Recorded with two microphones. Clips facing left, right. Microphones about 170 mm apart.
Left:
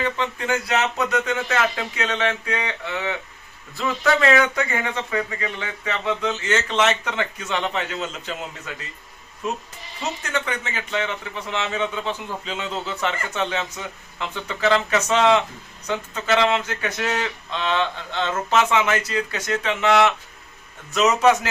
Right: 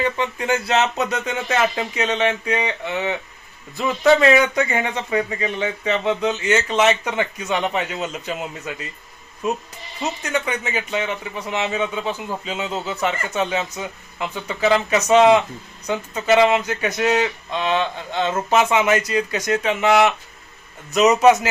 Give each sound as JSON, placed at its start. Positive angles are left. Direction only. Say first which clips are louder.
{"t": 0.0, "sound": "speech", "louder": "right 3 dB", "side_deg": -15}
{"t": 10.3, "sound": "a man's voice", "louder": "right 5 dB", "side_deg": -15}